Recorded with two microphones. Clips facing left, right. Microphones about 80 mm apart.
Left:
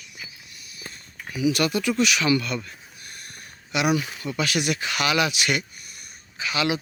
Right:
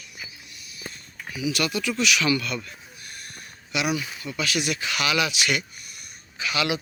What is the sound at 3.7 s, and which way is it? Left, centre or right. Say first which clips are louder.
Speech: left 3 dB; left.